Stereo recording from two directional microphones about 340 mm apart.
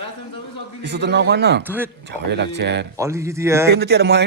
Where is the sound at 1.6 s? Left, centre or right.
Centre.